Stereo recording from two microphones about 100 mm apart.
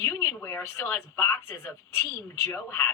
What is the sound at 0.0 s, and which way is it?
Speech, 25° left (ahead or behind).